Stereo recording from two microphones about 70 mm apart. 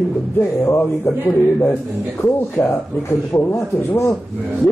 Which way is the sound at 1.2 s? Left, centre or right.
Left.